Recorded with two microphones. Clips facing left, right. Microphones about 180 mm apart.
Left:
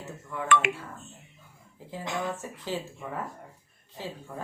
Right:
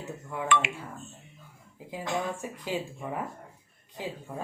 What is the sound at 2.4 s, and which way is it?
Speech, 15° right (ahead or behind).